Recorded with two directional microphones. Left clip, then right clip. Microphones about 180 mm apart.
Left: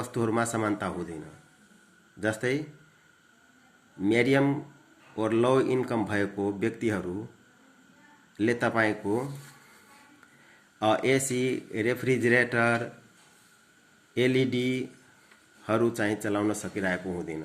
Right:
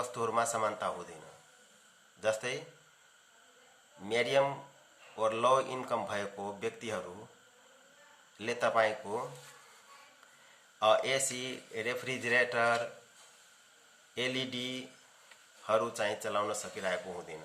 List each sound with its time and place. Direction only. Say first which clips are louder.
0.1 s speech: left 6 dB; 20° left (ahead or behind)
2.2 s speech: left 4 dB; 20° left (ahead or behind)
4.0 s speech: left 5 dB; 20° left (ahead or behind)
8.4 s speech: left 4 dB; 20° left (ahead or behind)
10.8 s speech: left 3 dB; 20° left (ahead or behind)
14.2 s speech: left 9 dB; 20° left (ahead or behind)
16.0 s speech: left 4 dB; 20° left (ahead or behind)